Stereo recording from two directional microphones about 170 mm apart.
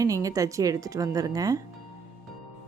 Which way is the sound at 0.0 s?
20° right (ahead or behind).